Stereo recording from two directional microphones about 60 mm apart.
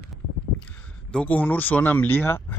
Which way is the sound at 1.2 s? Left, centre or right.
Left.